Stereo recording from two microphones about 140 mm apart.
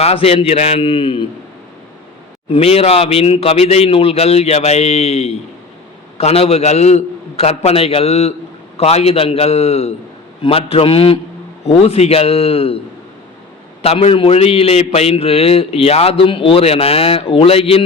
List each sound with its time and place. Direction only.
0.0 s a man's voice: 45° left (ahead or behind)
2.5 s a man's voice: 45° left (ahead or behind)
13.8 s a man's voice: 45° left (ahead or behind)